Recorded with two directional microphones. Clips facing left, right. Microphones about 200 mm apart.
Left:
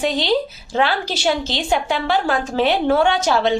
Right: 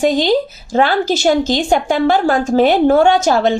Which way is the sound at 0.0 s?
45° right (ahead or behind).